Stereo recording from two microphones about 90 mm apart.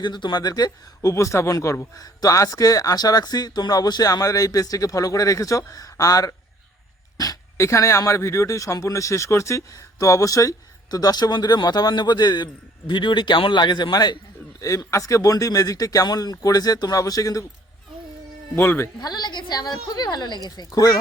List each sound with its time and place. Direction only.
0.0 s a woman's voice: 55° left (ahead or behind)
12.9 s speech: 60° left (ahead or behind)
14.6 s speech: 40° left (ahead or behind)
18.5 s speech: 25° left (ahead or behind)
18.9 s a woman's voice: 50° left (ahead or behind)